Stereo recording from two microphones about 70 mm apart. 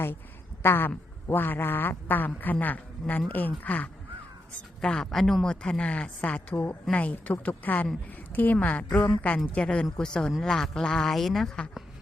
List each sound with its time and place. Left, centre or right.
0.6 s speech: left
4.8 s a man's voice: centre